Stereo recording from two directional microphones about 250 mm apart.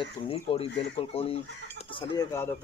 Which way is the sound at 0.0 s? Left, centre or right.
Left.